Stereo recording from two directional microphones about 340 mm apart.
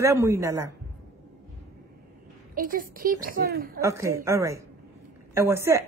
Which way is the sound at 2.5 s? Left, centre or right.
Right.